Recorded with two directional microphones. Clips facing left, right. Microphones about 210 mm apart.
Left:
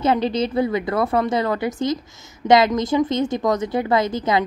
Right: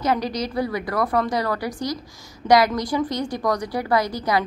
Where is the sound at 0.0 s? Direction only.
25° left (ahead or behind).